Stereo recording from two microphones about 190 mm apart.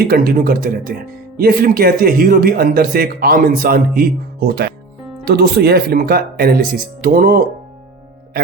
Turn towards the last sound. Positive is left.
turn(degrees=-50)  # may be behind; listen again after turning